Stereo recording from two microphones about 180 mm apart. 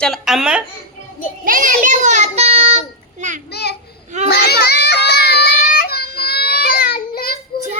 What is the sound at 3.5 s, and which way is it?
Speech, 65° left (ahead or behind).